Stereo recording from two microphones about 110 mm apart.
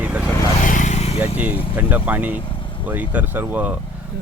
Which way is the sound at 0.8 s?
85° left.